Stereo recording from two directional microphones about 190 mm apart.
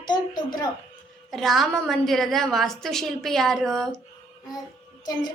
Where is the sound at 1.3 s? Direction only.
Centre (ahead or behind).